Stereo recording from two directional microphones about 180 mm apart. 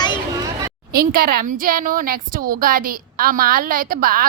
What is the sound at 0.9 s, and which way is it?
A woman's voice, 55° right (ahead or behind).